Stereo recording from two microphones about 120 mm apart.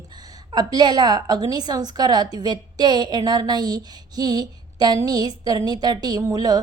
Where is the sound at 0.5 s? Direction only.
35° right (ahead or behind).